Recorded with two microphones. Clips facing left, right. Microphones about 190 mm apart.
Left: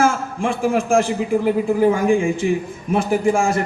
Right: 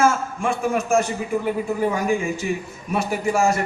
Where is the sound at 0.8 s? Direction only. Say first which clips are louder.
Left 4 dB; 90° left.